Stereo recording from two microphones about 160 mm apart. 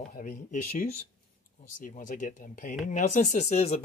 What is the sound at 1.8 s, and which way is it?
Speech, 55° left (ahead or behind).